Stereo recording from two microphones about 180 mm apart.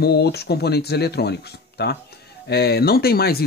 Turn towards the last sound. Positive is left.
turn(degrees=60)  # may be behind; listen again after turning